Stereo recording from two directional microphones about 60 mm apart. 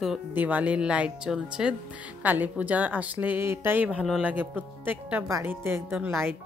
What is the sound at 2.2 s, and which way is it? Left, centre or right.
A woman's voice, right.